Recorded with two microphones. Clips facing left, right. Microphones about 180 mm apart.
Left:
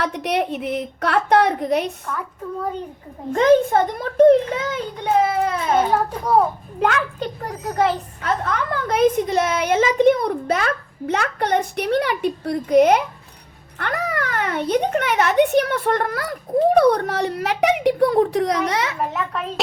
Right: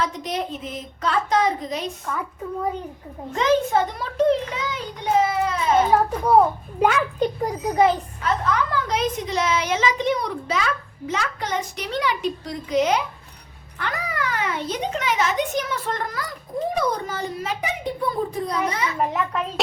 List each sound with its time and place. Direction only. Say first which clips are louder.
0.0 s a woman's voice: left 4 dB; 70° left (ahead or behind)
2.0 s a child's voice: even; 5° right (ahead or behind)
3.3 s a child's voice: left 5 dB; 55° left (ahead or behind)
5.9 s a child's voice: right 1 dB; 10° right (ahead or behind)
8.2 s a child's voice: even; 55° left (ahead or behind); by 18.9 s 80° left
19.0 s a child's voice: right 1 dB; 10° right (ahead or behind)